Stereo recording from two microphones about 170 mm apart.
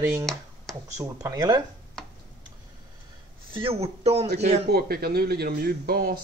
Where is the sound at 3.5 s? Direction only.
35° right (ahead or behind).